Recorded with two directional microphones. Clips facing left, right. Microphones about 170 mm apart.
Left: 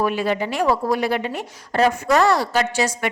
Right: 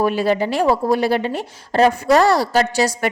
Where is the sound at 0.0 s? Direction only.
35° right (ahead or behind).